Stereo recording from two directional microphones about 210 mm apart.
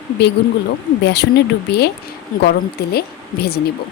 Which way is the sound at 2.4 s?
50° left (ahead or behind).